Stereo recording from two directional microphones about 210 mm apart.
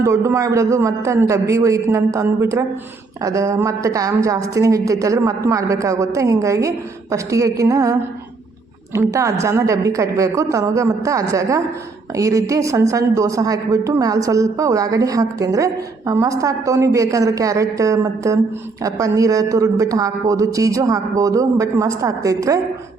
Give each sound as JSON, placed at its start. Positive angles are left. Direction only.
{"t": 0.0, "sound": "a woman's voice", "side_deg": -15}
{"t": 9.0, "sound": "a woman's voice", "side_deg": -15}